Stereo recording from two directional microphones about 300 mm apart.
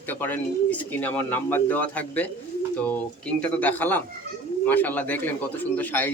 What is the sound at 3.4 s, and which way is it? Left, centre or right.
Speech, centre.